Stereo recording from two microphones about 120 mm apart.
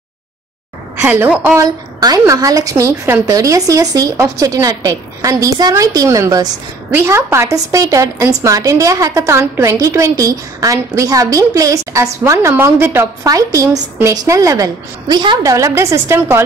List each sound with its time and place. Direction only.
0.9 s a woman's voice: 20° right (ahead or behind)
1.6 s a woman's voice: 30° right (ahead or behind)
6.9 s a woman's voice: 20° right (ahead or behind); by 15.5 s 35° right (ahead or behind)
15.5 s a woman's voice: 25° right (ahead or behind)